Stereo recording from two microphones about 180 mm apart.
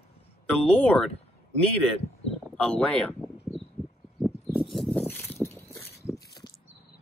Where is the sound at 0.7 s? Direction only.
5° left (ahead or behind).